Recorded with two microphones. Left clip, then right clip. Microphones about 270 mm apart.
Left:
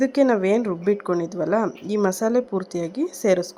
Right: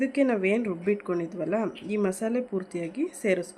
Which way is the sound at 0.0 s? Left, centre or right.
Centre.